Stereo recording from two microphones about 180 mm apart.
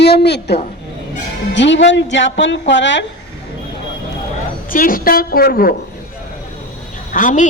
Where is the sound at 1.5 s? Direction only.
85° left.